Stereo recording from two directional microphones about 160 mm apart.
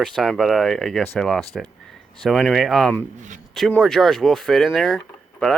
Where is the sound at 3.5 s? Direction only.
5° left (ahead or behind).